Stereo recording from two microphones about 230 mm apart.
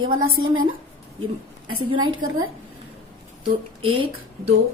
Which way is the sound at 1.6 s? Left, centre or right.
Right.